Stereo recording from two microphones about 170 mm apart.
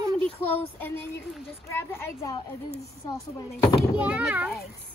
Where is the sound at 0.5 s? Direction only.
10° left (ahead or behind).